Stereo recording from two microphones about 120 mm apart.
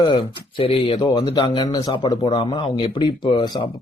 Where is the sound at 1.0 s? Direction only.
40° left (ahead or behind).